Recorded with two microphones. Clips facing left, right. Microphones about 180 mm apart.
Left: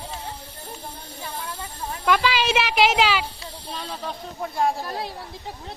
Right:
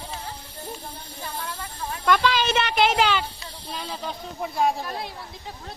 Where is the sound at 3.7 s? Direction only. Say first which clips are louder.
Even; 5° right (ahead or behind).